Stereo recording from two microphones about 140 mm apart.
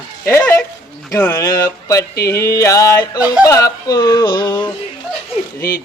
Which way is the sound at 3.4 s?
25° left (ahead or behind).